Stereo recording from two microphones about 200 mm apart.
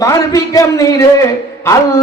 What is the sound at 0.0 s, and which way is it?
A man's voice, 15° left (ahead or behind).